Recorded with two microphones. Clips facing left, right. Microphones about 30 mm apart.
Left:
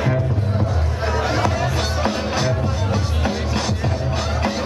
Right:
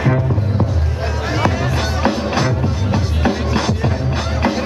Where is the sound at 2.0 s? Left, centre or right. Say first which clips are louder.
Right 5 dB; centre.